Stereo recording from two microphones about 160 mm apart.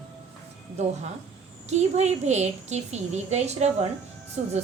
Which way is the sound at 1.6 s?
45° right (ahead or behind).